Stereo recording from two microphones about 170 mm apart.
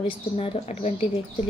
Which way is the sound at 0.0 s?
35° left (ahead or behind).